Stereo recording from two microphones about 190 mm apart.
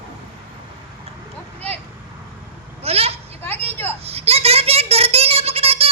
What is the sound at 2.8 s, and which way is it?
Goat, 30° right (ahead or behind).